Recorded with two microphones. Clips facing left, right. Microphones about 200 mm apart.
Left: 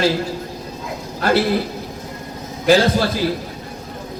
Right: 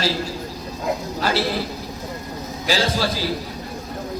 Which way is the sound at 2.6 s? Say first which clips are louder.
Left 7 dB; 55° left (ahead or behind).